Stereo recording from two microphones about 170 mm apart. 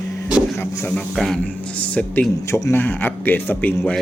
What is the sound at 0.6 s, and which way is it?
Speech, 10° left (ahead or behind).